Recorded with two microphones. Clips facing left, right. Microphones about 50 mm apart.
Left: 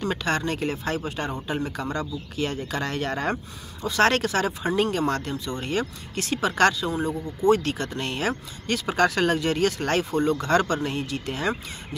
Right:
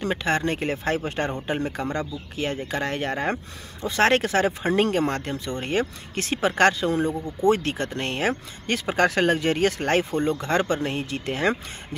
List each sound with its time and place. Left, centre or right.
0.0 s speech: right